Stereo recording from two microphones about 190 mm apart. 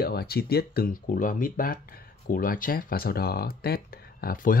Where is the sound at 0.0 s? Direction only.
55° left (ahead or behind).